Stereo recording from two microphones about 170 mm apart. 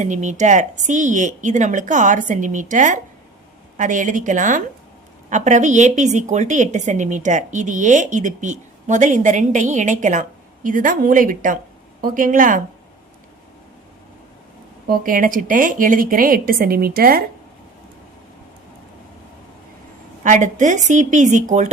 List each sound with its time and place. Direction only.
0.0 s a woman's voice: 45° right (ahead or behind)
14.8 s a woman's voice: 55° right (ahead or behind)
20.2 s a woman's voice: 45° right (ahead or behind)